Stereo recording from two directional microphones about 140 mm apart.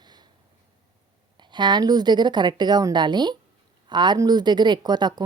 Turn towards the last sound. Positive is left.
turn(degrees=-30)  # may be behind; listen again after turning